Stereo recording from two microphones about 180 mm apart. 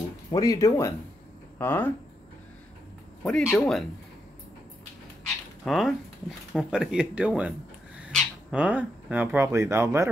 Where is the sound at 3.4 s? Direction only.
Centre (ahead or behind).